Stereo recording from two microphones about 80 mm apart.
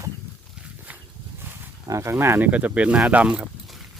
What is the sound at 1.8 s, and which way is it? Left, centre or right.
Speech, right.